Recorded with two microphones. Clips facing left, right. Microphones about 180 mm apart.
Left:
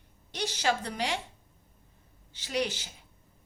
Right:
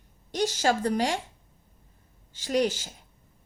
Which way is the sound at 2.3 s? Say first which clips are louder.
Right 6 dB; 45° right (ahead or behind).